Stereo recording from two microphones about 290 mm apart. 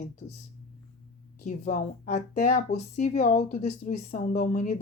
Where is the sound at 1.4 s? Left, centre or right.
Left.